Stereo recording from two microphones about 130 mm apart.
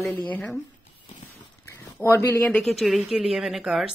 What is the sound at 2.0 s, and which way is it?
Speech, 20° left (ahead or behind).